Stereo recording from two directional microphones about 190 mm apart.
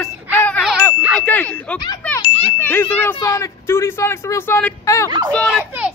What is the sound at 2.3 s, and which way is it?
Ding, 30° left (ahead or behind).